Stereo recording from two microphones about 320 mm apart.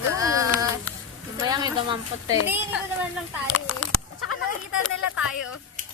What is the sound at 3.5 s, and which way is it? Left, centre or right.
Speech, left.